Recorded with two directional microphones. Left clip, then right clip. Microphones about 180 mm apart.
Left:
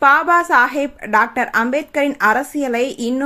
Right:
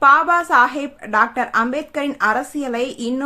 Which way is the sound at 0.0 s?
15° left (ahead or behind).